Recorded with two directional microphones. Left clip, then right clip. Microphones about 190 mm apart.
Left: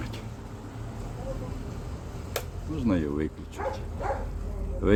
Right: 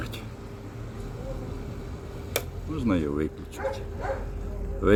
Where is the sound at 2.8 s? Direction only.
5° right (ahead or behind).